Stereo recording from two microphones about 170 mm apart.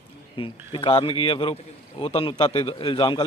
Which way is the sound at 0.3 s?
30° left (ahead or behind).